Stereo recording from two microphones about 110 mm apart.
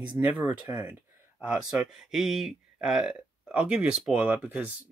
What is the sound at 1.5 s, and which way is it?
Speech, 5° right (ahead or behind).